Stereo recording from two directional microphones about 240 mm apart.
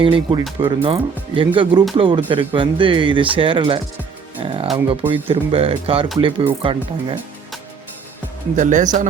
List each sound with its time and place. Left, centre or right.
0.0 s speech: right
4.4 s music: right
4.9 s speech: right
8.5 s speech: right